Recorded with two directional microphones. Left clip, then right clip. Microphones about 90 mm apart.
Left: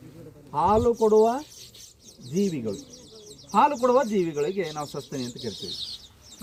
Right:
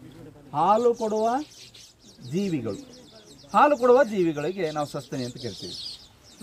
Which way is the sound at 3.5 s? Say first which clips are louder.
Right 2 dB; 25° right (ahead or behind).